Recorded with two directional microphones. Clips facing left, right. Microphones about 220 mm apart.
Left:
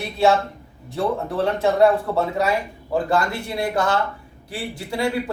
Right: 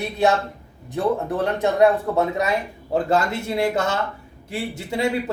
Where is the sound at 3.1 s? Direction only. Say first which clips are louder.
Right 1 dB; 20° right (ahead or behind).